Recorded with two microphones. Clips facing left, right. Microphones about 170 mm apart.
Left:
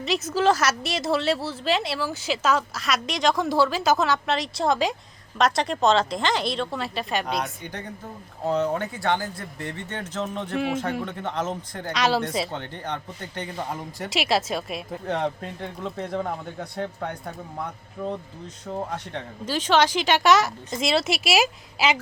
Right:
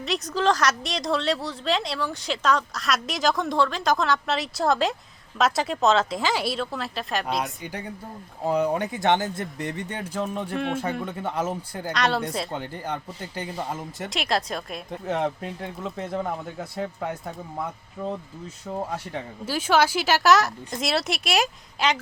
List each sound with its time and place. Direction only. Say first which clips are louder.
0.0 s speech: left 2 dB; centre (ahead or behind)
12.5 s speech: right 1 dB; 10° right (ahead or behind)